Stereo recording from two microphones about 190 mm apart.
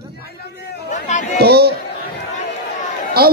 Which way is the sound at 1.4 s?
55° right (ahead or behind).